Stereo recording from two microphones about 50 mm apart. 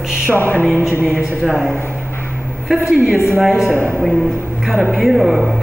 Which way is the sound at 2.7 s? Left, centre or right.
Centre.